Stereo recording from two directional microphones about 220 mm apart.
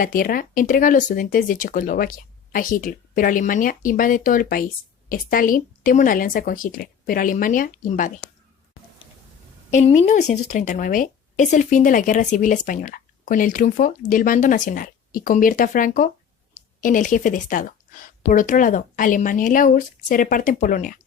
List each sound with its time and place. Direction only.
0.0 s speech: 40° left (ahead or behind)
9.6 s speech: 30° left (ahead or behind)